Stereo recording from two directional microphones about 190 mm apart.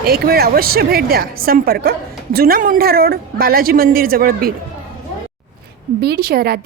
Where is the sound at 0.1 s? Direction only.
55° right (ahead or behind).